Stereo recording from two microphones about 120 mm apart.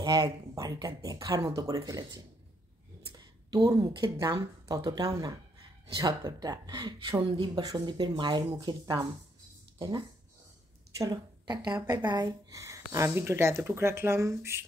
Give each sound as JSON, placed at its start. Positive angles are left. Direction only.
{"t": 0.0, "sound": "a woman's voice", "side_deg": -35}
{"t": 3.1, "sound": "a woman's voice", "side_deg": -35}